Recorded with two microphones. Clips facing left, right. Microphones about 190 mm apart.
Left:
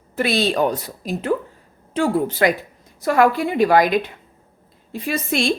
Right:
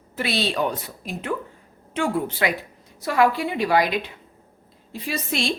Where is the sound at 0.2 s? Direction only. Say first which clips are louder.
Left 5 dB; 45° left (ahead or behind).